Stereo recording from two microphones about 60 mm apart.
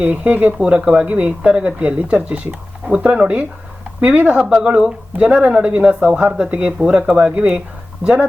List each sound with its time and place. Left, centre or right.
0.0 s speech: right